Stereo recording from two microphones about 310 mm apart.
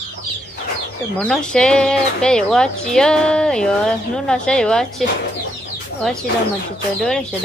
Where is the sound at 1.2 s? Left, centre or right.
Centre.